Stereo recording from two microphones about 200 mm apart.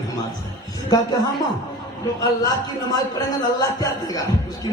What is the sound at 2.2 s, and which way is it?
Speech, 20° left (ahead or behind).